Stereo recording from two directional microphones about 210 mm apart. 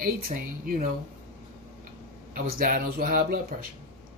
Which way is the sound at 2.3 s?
40° right (ahead or behind).